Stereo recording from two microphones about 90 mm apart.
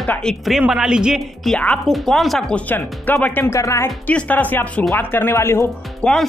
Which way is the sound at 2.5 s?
15° left (ahead or behind).